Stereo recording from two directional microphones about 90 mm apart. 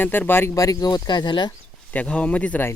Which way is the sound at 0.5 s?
40° left (ahead or behind).